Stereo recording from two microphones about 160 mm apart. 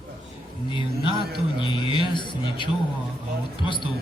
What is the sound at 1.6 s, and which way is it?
A man's voice, 30° left (ahead or behind).